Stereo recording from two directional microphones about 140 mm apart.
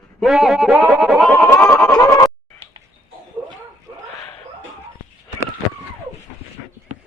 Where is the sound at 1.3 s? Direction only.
10° left (ahead or behind).